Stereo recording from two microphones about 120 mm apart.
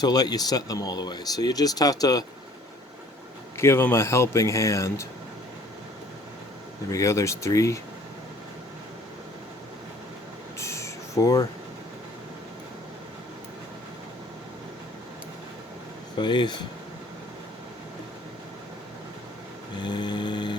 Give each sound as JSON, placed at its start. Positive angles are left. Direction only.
{"t": 0.0, "sound": "speech", "side_deg": 35}
{"t": 3.6, "sound": "speech", "side_deg": 20}
{"t": 6.9, "sound": "speech", "side_deg": 25}
{"t": 10.6, "sound": "a sound", "side_deg": 25}
{"t": 16.1, "sound": "speech", "side_deg": 40}
{"t": 19.8, "sound": "speech", "side_deg": 40}